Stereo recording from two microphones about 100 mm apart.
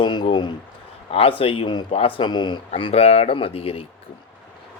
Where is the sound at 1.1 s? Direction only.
65° left (ahead or behind); by 1.9 s 50° left (ahead or behind).